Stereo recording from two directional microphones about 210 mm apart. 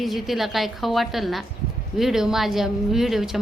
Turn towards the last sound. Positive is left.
turn(degrees=0)  # may be behind; listen again after turning